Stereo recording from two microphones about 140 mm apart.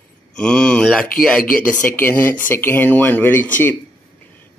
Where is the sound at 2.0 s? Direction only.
15° left (ahead or behind).